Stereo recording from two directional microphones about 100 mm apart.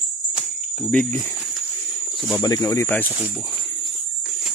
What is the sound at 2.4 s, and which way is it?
Speech, 35° left (ahead or behind).